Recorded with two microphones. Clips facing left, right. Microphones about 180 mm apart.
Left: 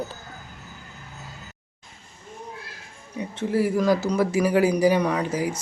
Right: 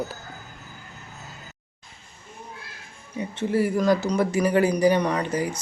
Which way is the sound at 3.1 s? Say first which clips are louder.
Even; centre (ahead or behind).